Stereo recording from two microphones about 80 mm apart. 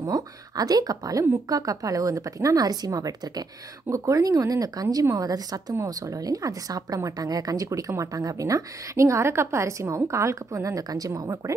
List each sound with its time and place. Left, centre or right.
0.0 s a woman's voice: right